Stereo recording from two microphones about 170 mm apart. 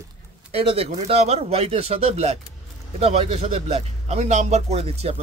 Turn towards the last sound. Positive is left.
turn(degrees=-40)  # may be behind; listen again after turning